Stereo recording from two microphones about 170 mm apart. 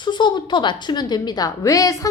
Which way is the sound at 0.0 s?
25° left (ahead or behind).